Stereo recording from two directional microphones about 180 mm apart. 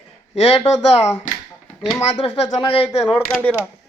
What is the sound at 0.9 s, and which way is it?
Speech, 15° left (ahead or behind).